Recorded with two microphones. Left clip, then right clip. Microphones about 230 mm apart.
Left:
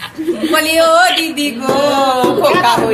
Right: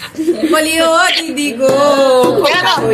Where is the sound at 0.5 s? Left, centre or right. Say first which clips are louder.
Left 2 dB; centre.